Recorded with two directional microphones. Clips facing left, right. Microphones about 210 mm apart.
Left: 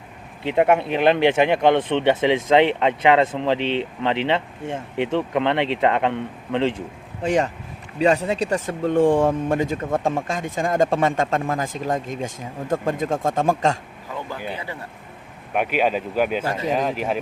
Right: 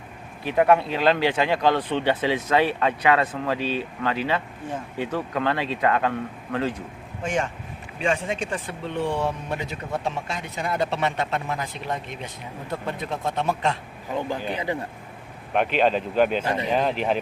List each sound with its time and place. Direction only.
0.4 s speech: 25° left (ahead or behind); by 13.7 s 45° left (ahead or behind)
14.1 s speech: 15° right (ahead or behind)
15.5 s speech: 10° left (ahead or behind)